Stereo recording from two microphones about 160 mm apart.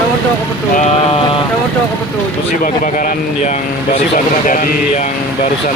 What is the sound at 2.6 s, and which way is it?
Speech, 60° left (ahead or behind).